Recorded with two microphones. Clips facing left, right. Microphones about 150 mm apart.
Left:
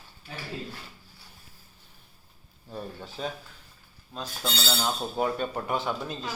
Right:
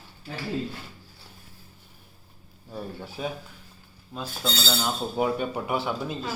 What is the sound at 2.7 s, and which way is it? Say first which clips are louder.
Speech: right 2 dB; 10° right (ahead or behind).